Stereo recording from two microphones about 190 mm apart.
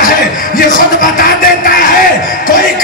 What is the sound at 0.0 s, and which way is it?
Music, 45° left (ahead or behind).